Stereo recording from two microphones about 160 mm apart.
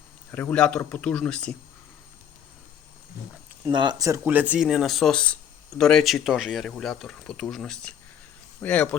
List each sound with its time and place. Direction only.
0.3 s speech: 10° left (ahead or behind)
3.7 s speech: 30° right (ahead or behind)
4.2 s speech: 10° right (ahead or behind); by 9.0 s 10° left (ahead or behind)